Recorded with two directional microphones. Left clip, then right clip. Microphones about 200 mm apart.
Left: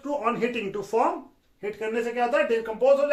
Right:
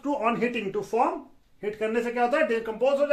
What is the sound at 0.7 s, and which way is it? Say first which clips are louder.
Speech: even; 20° right (ahead or behind).